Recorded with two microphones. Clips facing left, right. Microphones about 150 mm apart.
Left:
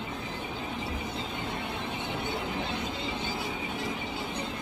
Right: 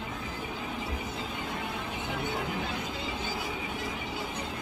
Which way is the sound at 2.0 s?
25° left (ahead or behind).